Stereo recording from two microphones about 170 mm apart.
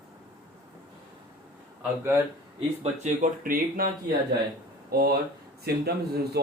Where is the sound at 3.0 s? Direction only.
50° right (ahead or behind).